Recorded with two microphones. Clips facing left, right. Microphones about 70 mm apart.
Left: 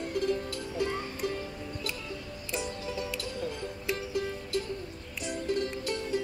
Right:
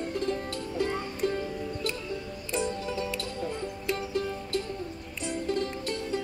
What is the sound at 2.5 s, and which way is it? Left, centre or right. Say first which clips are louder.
Music: right 4 dB; right.